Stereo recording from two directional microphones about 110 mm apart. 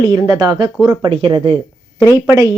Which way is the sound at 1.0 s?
55° right (ahead or behind).